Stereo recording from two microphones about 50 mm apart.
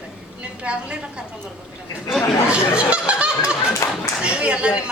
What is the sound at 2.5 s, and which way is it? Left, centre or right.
A woman's voice, right.